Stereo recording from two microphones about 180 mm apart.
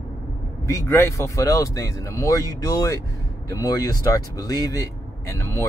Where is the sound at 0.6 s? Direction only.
15° left (ahead or behind).